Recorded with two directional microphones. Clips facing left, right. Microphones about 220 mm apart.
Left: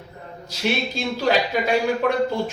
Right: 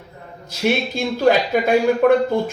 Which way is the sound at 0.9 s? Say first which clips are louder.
Right 5 dB; 50° right (ahead or behind).